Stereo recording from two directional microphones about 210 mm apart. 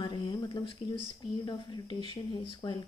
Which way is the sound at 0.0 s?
25° left (ahead or behind).